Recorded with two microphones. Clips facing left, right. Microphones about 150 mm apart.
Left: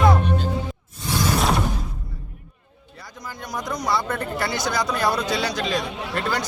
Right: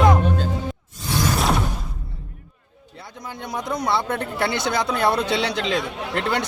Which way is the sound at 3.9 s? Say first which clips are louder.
Even; 25° right (ahead or behind).